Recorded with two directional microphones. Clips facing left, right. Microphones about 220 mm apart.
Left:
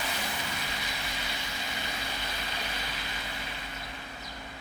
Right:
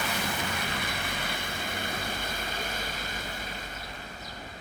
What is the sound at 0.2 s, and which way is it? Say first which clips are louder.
Vehicle: right 4 dB; 55° right (ahead or behind).